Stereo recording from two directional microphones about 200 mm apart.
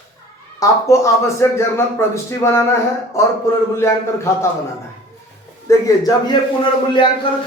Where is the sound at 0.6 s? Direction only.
15° left (ahead or behind).